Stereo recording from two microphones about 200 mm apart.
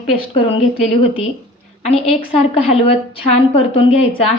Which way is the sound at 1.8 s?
30° left (ahead or behind).